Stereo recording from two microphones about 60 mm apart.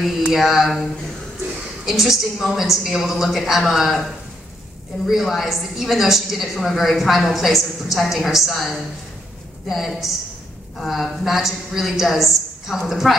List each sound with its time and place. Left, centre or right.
0.2 s a woman's voice: centre
1.9 s a woman's voice: centre
5.0 s a woman's voice: centre